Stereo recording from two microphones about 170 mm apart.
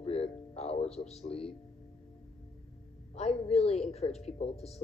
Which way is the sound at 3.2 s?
35° left (ahead or behind).